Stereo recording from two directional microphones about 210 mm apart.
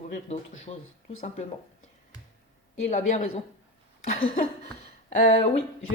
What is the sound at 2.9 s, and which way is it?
Speech, 35° left (ahead or behind).